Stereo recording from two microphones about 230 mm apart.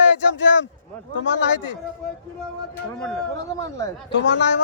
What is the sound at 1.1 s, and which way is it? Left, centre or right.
Speech, left.